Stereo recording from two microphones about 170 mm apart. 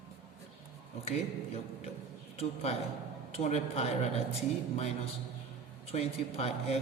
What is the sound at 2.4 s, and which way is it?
A man's voice, 35° left (ahead or behind).